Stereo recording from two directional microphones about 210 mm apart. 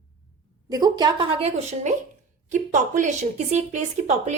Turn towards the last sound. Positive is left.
turn(degrees=-35)  # may be behind; listen again after turning